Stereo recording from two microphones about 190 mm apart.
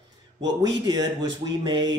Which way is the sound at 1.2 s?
20° right (ahead or behind).